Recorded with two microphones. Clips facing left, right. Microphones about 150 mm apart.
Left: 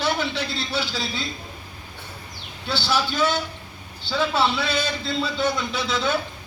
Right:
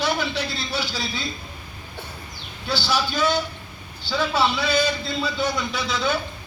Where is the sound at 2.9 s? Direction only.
25° left (ahead or behind).